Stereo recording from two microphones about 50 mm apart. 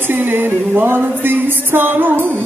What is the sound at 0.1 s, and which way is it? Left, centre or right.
Music, right.